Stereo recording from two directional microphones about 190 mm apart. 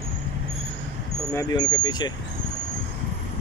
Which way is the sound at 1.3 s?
20° left (ahead or behind).